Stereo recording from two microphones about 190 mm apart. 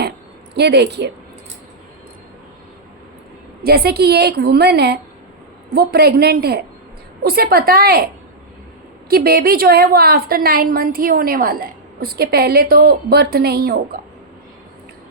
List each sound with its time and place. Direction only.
0.5 s a woman's voice: 60° right (ahead or behind)
3.6 s a woman's voice: 55° right (ahead or behind)